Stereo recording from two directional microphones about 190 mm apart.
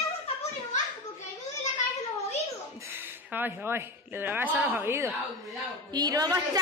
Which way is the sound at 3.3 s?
10° right (ahead or behind).